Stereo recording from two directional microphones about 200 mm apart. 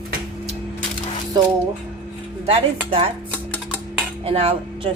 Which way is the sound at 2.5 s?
30° right (ahead or behind).